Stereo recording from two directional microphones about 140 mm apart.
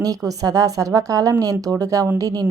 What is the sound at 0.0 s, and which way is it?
A woman's voice, 25° right (ahead or behind).